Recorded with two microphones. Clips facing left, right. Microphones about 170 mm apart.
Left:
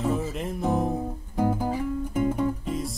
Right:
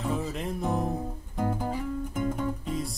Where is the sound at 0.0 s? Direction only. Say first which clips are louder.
Left 3 dB; centre (ahead or behind).